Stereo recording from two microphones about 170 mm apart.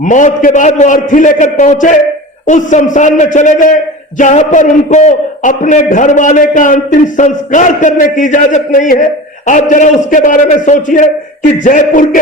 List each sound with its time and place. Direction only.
0.0 s a man's voice: 45° left (ahead or behind)